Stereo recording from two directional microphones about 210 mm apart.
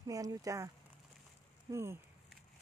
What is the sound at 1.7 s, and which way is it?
Speech, 10° right (ahead or behind).